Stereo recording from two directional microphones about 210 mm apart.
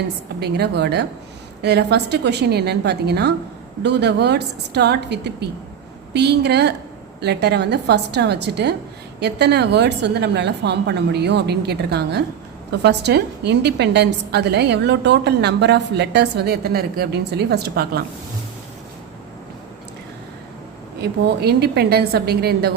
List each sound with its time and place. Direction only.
0.3 s a woman's voice: 50° right (ahead or behind)
21.0 s a woman's voice: 50° right (ahead or behind)